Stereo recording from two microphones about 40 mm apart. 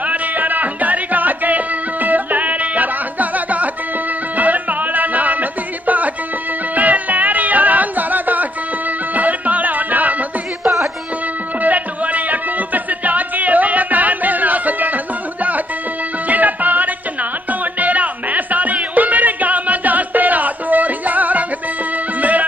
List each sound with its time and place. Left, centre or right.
0.0 s music: right
11.6 s music: right
16.3 s music: right